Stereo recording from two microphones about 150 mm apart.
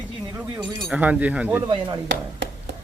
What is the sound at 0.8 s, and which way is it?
Speech, 10° right (ahead or behind).